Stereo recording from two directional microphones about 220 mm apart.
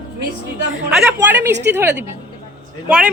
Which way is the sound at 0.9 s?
5° right (ahead or behind).